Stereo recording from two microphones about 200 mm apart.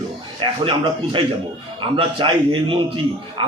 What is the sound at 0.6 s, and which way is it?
A man's voice, 25° right (ahead or behind).